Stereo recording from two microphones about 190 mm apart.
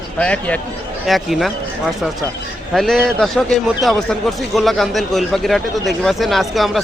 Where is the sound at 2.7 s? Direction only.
Centre (ahead or behind).